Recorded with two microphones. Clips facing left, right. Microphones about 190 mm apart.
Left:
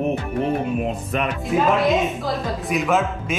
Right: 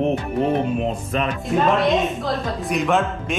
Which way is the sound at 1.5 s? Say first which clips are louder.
Even; centre (ahead or behind).